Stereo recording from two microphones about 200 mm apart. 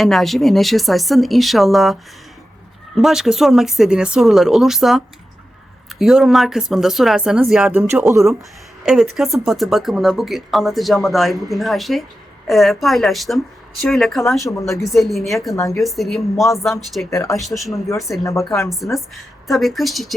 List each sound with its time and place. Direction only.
0.0 s speech: centre (ahead or behind)
8.8 s speech: centre (ahead or behind)
17.1 s speech: 15° left (ahead or behind)
17.4 s speech: centre (ahead or behind)
18.2 s speech: 15° left (ahead or behind)
18.9 s speech: centre (ahead or behind)